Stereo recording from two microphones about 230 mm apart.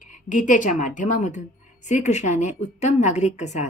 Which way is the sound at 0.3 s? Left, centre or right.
Left.